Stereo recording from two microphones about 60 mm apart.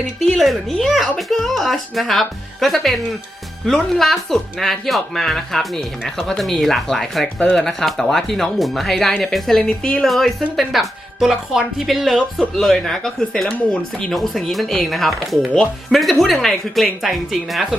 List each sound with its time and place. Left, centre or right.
0.3 s speech: centre